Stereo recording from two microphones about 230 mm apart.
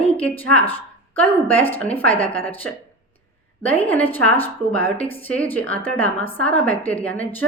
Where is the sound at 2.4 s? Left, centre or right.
Centre.